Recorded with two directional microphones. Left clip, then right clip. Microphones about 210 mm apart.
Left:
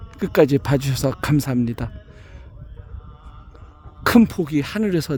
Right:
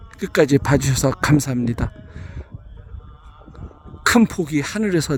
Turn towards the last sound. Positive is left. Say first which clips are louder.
# right 2 dB
turn(degrees=-5)  # may be behind; listen again after turning